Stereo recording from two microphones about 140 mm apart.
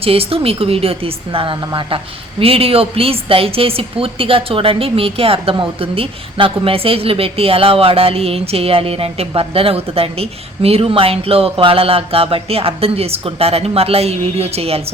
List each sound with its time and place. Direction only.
0.0 s a woman's voice: 45° right (ahead or behind)